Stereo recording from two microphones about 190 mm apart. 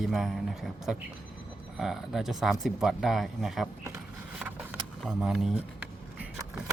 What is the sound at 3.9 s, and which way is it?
Vehicle, 10° right (ahead or behind).